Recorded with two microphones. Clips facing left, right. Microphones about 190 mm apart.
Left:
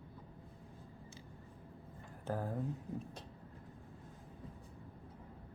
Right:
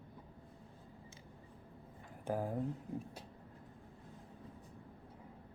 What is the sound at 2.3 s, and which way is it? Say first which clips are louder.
Speech: right 2 dB; 10° right (ahead or behind).